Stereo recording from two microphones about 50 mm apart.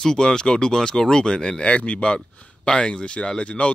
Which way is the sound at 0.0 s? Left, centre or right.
Centre.